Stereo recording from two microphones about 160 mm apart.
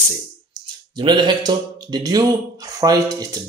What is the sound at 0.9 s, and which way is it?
Speech, 30° right (ahead or behind).